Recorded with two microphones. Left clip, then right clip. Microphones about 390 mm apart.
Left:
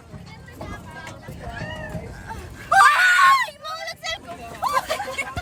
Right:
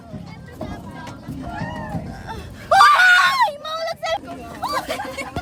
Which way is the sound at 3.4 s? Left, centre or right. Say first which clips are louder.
Right 8 dB; centre.